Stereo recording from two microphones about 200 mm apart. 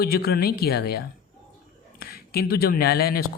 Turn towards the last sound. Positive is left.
turn(degrees=50)  # may be behind; listen again after turning